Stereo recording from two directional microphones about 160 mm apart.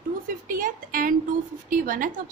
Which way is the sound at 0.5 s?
60° right (ahead or behind).